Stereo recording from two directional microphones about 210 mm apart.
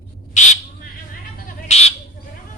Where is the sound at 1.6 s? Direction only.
30° left (ahead or behind).